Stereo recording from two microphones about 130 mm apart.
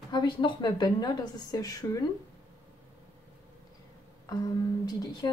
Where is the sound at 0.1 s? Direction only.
35° left (ahead or behind).